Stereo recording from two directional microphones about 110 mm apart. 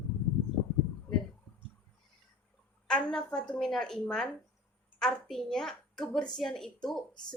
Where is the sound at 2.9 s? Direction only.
5° left (ahead or behind).